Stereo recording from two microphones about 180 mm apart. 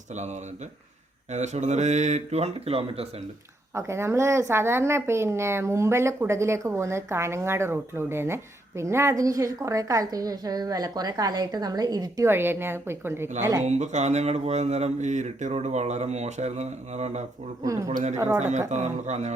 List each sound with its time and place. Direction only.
1.3 s speech: 40° right (ahead or behind)
3.8 s a woman's voice: 15° right (ahead or behind)
13.7 s speech: 40° right (ahead or behind)
17.6 s speech: 20° right (ahead or behind)
17.9 s speech: 40° right (ahead or behind)